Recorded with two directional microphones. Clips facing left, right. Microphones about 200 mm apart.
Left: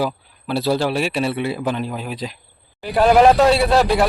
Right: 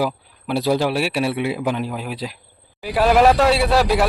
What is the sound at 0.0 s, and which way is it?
A man's voice, 15° right (ahead or behind).